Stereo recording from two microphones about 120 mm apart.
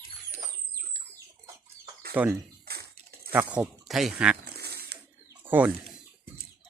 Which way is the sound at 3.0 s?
65° right (ahead or behind).